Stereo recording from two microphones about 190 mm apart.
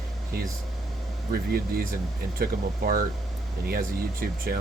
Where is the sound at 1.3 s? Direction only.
50° right (ahead or behind).